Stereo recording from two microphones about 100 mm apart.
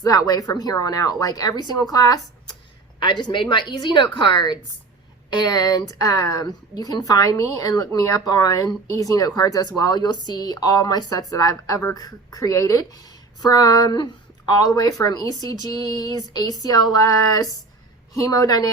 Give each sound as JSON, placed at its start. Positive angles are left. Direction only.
{"t": 0.0, "sound": "a woman's voice", "side_deg": 40}